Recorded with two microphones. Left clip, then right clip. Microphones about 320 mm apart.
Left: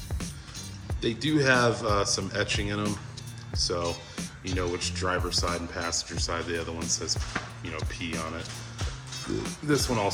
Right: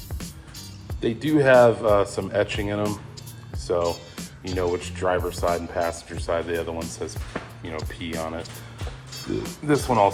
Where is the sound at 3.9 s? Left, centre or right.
Centre.